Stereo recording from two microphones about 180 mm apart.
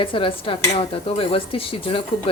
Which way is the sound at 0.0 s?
30° left (ahead or behind).